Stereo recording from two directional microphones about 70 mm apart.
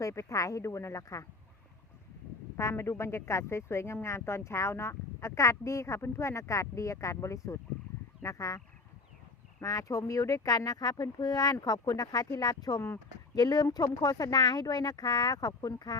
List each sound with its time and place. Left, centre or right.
0.0 s speech: left
2.6 s speech: left
9.6 s speech: left